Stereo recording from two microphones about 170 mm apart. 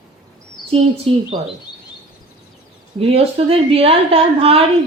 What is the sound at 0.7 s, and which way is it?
Speech, 35° right (ahead or behind).